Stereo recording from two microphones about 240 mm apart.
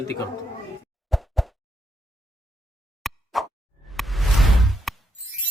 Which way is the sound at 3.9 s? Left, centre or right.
Centre.